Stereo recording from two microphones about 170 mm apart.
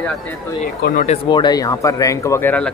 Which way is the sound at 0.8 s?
55° left (ahead or behind).